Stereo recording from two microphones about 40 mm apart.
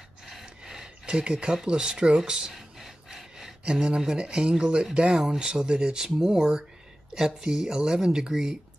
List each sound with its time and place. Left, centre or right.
0.3 s gasp: centre
1.0 s a sound: right; by 3.5 s centre
3.6 s speech: right